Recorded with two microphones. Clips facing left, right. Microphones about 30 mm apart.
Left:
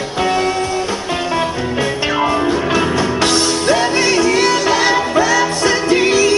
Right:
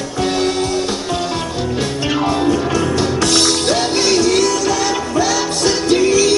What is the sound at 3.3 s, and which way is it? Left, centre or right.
Music, right.